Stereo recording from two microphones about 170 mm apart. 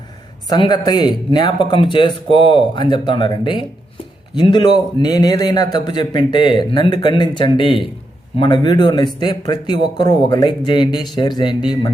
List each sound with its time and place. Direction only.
0.5 s a man's voice: 25° left (ahead or behind)